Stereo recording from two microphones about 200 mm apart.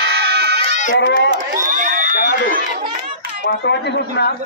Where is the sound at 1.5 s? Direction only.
40° right (ahead or behind).